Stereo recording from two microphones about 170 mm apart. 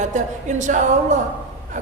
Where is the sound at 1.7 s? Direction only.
45° right (ahead or behind).